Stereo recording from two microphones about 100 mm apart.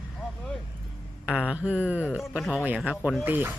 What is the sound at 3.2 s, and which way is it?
Speech, 20° right (ahead or behind).